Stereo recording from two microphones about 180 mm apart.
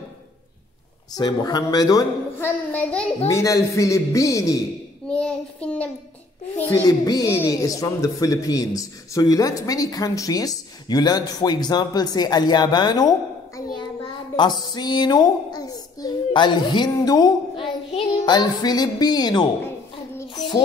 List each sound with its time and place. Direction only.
1.1 s speech: 20° left (ahead or behind)
2.7 s a man's voice: 5° left (ahead or behind)
5.1 s a man's voice: 5° left (ahead or behind)
6.6 s speech: 20° left (ahead or behind)
13.6 s child singing: 25° left (ahead or behind)
14.3 s a child's voice: 25° left (ahead or behind)
20.2 s a sound: 25° left (ahead or behind)